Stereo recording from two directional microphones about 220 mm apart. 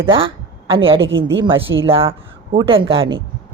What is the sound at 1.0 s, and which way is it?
Speech, 60° right (ahead or behind).